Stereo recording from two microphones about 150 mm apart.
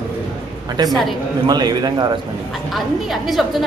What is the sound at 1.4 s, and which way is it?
Speech, 30° right (ahead or behind).